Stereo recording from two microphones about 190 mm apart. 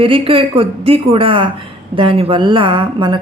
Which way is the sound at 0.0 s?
30° right (ahead or behind).